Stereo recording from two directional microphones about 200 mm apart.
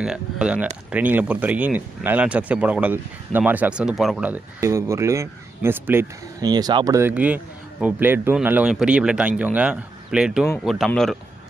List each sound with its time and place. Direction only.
0.0 s speech: 5° right (ahead or behind)